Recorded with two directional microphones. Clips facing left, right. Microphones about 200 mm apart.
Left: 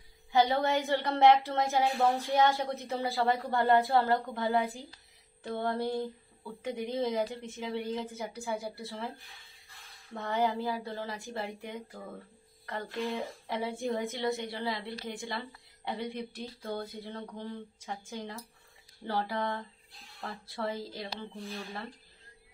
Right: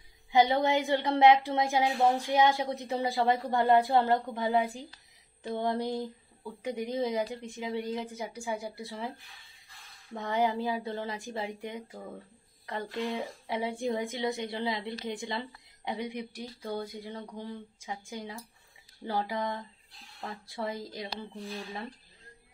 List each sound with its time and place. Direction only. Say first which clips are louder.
0.3 s speech: right 2 dB; 15° right (ahead or behind)
10.1 s speech: right 1 dB; 15° right (ahead or behind)